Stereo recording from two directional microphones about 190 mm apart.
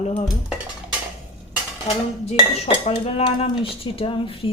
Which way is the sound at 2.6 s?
30° left (ahead or behind).